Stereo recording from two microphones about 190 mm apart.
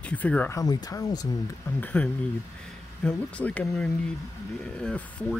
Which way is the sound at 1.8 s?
10° left (ahead or behind).